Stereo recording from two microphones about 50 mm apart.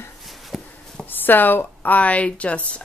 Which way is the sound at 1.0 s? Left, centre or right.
Left.